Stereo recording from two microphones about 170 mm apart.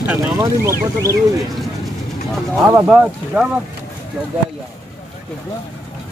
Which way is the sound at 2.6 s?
10° right (ahead or behind).